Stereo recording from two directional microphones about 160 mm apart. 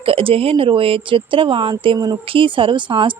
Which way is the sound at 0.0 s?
35° right (ahead or behind).